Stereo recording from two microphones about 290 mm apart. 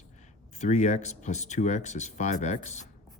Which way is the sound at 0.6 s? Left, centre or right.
Left.